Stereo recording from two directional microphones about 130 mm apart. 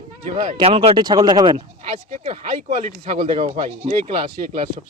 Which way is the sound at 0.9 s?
30° right (ahead or behind).